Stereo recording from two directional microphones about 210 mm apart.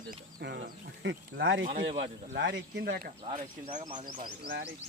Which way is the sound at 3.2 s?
35° right (ahead or behind).